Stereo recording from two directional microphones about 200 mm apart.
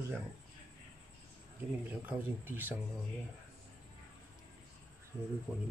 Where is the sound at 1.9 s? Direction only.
10° right (ahead or behind).